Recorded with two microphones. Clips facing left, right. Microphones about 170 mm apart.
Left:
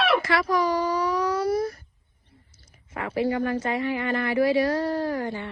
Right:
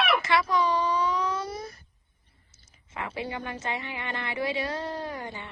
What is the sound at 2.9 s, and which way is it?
Speech, 25° right (ahead or behind).